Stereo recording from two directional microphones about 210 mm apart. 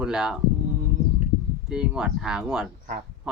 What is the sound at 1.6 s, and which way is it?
Speech, 5° right (ahead or behind).